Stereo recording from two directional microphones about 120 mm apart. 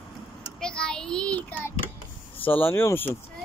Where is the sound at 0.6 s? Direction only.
5° left (ahead or behind).